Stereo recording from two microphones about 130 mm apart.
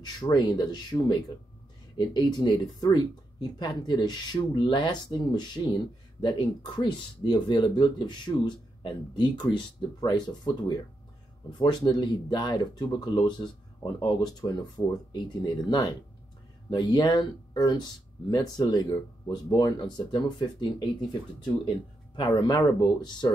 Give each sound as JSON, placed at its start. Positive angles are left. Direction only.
{"t": 0.0, "sound": "speech", "side_deg": 30}